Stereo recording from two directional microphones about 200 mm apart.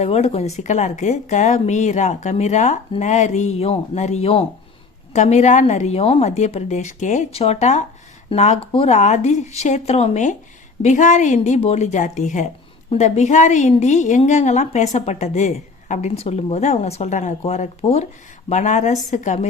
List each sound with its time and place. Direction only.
0.0 s a woman's voice: 30° left (ahead or behind)